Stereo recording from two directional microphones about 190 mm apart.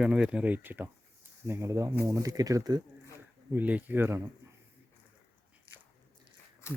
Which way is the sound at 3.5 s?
10° right (ahead or behind).